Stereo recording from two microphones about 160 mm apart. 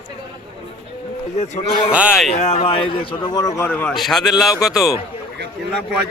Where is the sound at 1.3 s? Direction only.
45° left (ahead or behind); by 4.9 s centre (ahead or behind).